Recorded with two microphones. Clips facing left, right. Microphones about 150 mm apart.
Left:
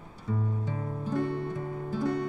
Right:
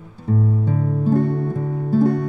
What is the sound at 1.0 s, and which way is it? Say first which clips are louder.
Music: right 10 dB; 45° right (ahead or behind).